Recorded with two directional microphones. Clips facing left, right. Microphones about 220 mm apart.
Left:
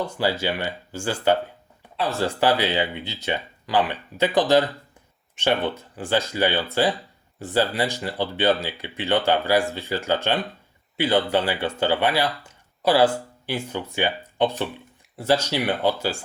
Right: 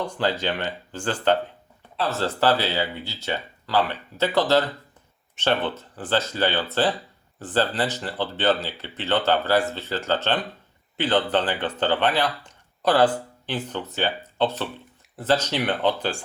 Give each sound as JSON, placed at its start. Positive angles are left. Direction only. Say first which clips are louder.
{"t": 0.0, "sound": "speech", "louder": "left 1 dB", "side_deg": 10}